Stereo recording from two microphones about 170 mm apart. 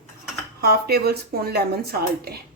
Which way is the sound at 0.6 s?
65° right (ahead or behind).